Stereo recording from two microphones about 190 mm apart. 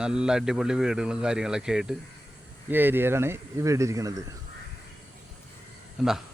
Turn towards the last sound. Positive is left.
turn(degrees=0)  # may be behind; listen again after turning